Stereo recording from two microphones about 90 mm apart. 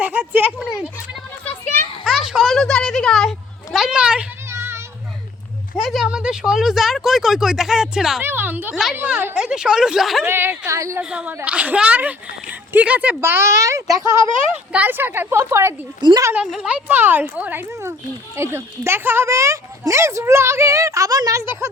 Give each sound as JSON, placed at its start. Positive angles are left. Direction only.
{"t": 0.0, "sound": "a woman's voice", "side_deg": -20}
{"t": 1.5, "sound": "a sound", "side_deg": 25}
{"t": 2.0, "sound": "a sound", "side_deg": -5}
{"t": 4.4, "sound": "children playing", "side_deg": -30}
{"t": 5.7, "sound": "speech", "side_deg": 0}
{"t": 8.2, "sound": "a woman's voice", "side_deg": -25}
{"t": 8.7, "sound": "speech", "side_deg": -5}
{"t": 10.2, "sound": "a woman's voice", "side_deg": -25}
{"t": 11.0, "sound": "speech", "side_deg": -10}
{"t": 13.2, "sound": "speech", "side_deg": -30}
{"t": 14.7, "sound": "a woman's voice", "side_deg": -20}
{"t": 16.0, "sound": "speech", "side_deg": -55}
{"t": 16.5, "sound": "a woman's voice", "side_deg": -10}
{"t": 17.7, "sound": "a woman's voice", "side_deg": -30}